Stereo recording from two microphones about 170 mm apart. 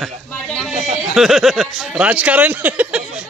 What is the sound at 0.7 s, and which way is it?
Speech, 50° right (ahead or behind).